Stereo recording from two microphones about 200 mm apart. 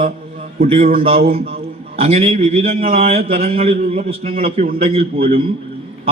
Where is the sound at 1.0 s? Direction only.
30° right (ahead or behind).